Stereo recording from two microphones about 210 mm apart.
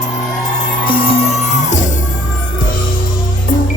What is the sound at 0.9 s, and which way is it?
Music, 30° left (ahead or behind).